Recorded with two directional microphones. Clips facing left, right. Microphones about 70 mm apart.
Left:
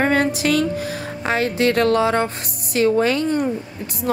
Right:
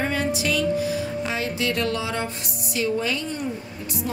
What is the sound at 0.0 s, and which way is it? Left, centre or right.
Music, left.